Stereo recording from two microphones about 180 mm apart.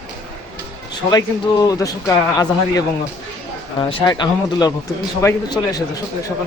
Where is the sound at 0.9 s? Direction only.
20° left (ahead or behind).